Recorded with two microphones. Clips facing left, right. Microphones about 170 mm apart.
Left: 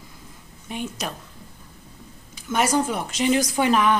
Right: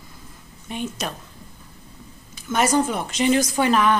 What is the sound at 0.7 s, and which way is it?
Speech, 10° left (ahead or behind).